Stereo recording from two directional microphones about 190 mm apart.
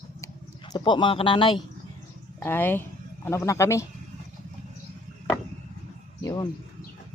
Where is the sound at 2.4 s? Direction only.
10° left (ahead or behind).